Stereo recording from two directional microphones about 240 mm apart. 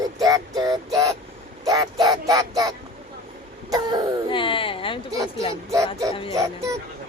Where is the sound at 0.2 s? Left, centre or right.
Centre.